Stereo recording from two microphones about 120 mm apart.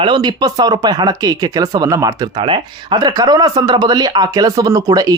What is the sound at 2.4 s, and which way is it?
Speech, 45° right (ahead or behind).